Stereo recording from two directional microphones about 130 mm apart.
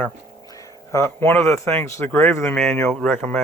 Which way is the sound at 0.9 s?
20° left (ahead or behind).